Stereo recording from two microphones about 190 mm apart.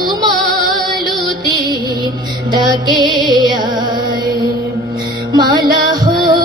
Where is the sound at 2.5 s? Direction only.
20° right (ahead or behind).